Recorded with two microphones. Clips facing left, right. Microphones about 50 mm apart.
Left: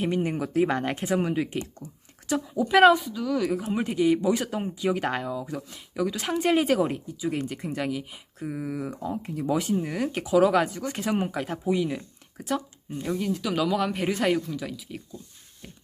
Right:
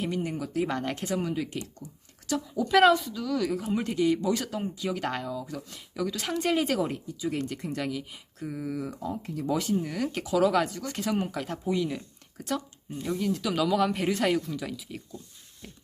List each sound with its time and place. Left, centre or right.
0.0 s speech: left
1.2 s a woman's voice: left; by 15.8 s centre